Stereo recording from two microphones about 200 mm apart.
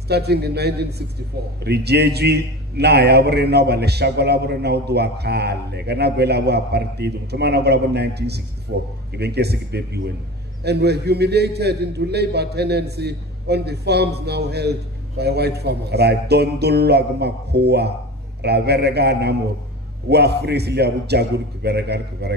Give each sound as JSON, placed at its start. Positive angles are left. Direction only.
{"t": 0.1, "sound": "a man's voice", "side_deg": -55}
{"t": 8.7, "sound": "a man's voice", "side_deg": -65}
{"t": 9.1, "sound": "a man's voice", "side_deg": -55}